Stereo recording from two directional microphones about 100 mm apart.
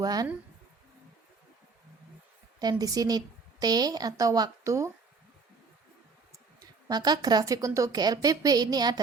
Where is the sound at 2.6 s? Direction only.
40° right (ahead or behind).